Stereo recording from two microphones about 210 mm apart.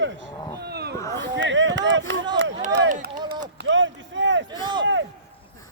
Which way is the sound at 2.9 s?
35° right (ahead or behind).